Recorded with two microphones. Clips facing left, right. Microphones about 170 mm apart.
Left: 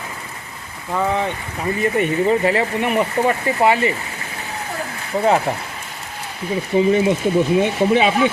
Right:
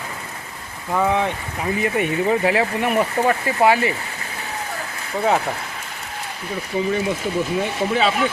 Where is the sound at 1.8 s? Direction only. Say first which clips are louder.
Left 3 dB; 5° right (ahead or behind).